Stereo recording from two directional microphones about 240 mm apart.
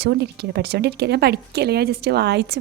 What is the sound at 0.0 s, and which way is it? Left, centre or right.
A woman's voice, right.